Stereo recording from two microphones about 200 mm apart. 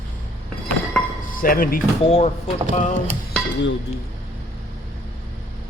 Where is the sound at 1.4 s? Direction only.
45° left (ahead or behind).